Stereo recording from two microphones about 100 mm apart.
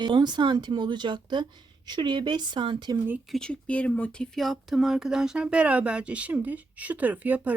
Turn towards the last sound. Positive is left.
turn(degrees=-15)  # may be behind; listen again after turning